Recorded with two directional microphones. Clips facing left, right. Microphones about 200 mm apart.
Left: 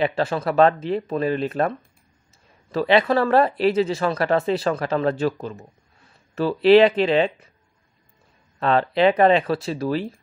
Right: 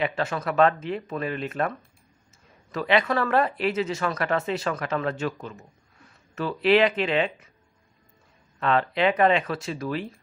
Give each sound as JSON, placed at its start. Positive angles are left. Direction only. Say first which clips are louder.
{"t": 0.0, "sound": "speech", "louder": "left 5 dB", "side_deg": 30}
{"t": 8.5, "sound": "speech", "louder": "left 4 dB", "side_deg": 35}